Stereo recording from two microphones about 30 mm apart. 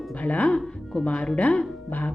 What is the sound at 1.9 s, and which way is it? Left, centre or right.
Speech, left.